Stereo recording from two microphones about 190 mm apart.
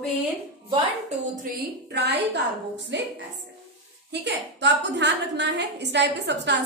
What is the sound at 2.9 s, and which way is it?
Speech, 70° right (ahead or behind).